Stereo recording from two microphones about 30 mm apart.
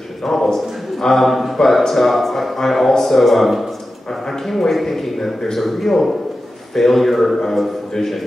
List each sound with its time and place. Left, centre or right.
0.2 s a man's voice: centre